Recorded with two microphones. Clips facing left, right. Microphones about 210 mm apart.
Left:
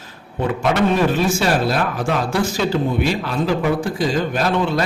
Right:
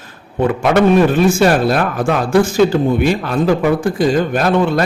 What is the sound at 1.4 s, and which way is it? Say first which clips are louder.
Speech: right 6 dB; 50° right (ahead or behind).